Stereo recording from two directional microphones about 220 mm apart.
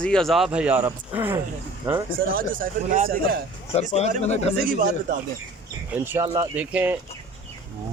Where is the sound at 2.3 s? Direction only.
40° right (ahead or behind).